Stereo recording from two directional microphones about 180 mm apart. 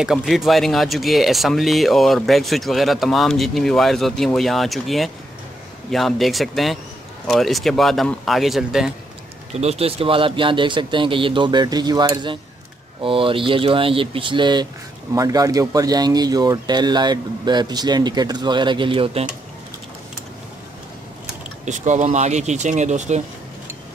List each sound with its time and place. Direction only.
0.0 s speech: centre (ahead or behind)
9.5 s speech: 35° right (ahead or behind)
21.6 s speech: 40° right (ahead or behind)